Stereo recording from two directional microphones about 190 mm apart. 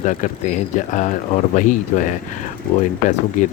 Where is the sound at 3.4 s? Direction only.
40° left (ahead or behind).